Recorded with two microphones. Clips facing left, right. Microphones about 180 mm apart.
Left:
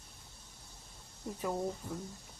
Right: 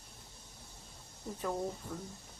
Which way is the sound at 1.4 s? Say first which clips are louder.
Left 1 dB; 10° left (ahead or behind).